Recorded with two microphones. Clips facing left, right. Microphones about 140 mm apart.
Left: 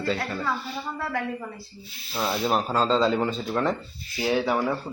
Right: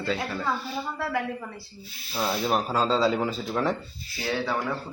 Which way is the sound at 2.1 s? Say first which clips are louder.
Left 1 dB; centre (ahead or behind).